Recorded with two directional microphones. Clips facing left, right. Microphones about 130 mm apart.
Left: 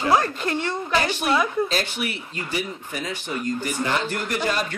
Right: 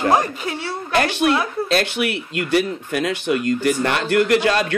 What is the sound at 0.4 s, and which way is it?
Speech, 10° right (ahead or behind).